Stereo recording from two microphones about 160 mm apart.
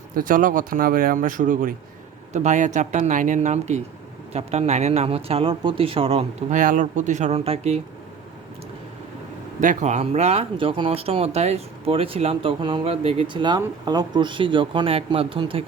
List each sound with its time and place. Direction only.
0.1 s speech: 60° right (ahead or behind); by 6.6 s 35° right (ahead or behind)
6.6 s speech: 55° right (ahead or behind)
9.6 s speech: 50° right (ahead or behind); by 15.6 s 35° right (ahead or behind)